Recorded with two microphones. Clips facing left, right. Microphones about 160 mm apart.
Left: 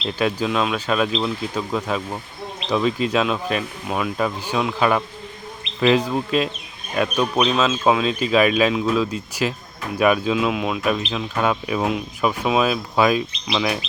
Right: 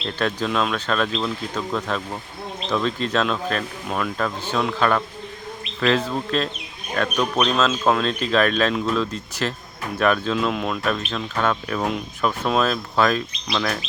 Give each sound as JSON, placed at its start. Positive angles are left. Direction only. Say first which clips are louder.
{"t": 0.0, "sound": "speech", "louder": "left 2 dB", "side_deg": 10}